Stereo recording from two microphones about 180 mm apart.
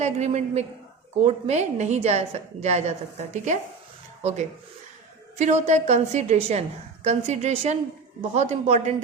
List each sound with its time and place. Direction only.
0.0 s a woman's voice: 40° right (ahead or behind)